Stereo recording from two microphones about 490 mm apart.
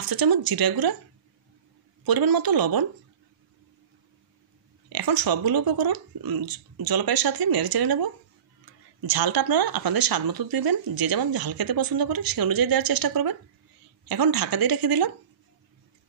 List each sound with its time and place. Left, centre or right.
0.0 s a woman's voice: right
2.0 s a woman's voice: right
4.8 s a woman's voice: right